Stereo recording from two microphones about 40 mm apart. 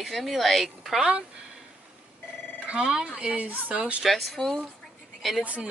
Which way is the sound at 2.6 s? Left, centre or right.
Right.